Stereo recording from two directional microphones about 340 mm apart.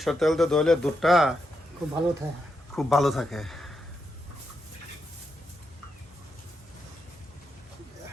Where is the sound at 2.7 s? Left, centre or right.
Centre.